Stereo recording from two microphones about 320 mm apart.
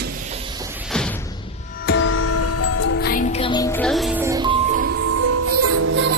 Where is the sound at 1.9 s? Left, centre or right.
Left.